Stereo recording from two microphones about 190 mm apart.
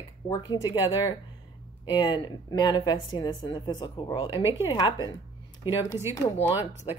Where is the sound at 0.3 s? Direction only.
20° left (ahead or behind).